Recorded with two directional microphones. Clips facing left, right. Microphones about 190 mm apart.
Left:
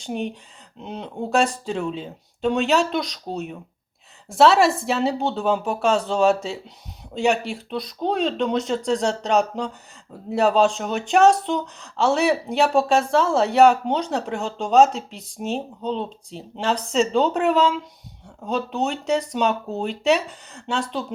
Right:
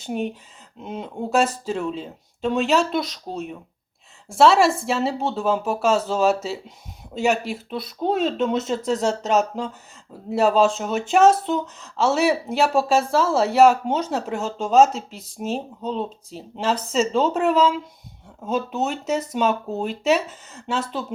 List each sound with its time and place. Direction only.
0.0 s speech: 5° right (ahead or behind)